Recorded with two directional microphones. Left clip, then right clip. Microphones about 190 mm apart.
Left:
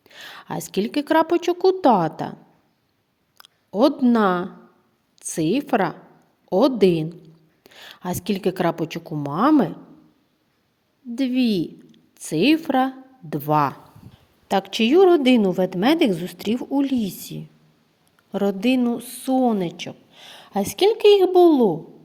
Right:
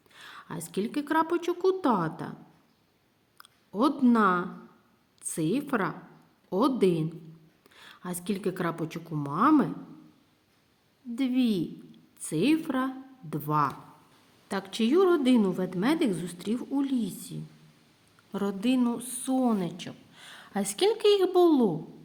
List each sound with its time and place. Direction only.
0.0 s a woman's voice: 35° left (ahead or behind)
3.3 s a woman's voice: 30° left (ahead or behind)
11.1 s a woman's voice: 30° left (ahead or behind)